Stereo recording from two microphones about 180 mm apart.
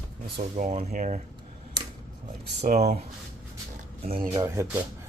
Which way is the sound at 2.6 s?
40° right (ahead or behind).